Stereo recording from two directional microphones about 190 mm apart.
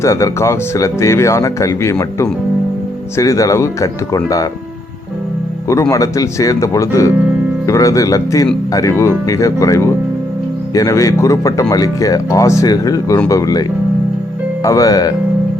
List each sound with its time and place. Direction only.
0.0 s speech: 15° left (ahead or behind)
5.9 s speech: 20° left (ahead or behind)